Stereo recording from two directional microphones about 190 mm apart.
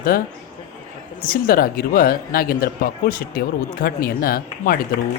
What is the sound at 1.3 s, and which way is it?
A man's voice, 50° left (ahead or behind).